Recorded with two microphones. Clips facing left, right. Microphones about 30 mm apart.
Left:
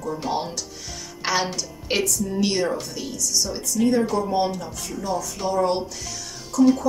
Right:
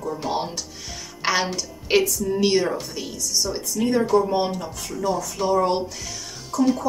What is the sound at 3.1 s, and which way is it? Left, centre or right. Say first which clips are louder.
A woman's voice: even; centre.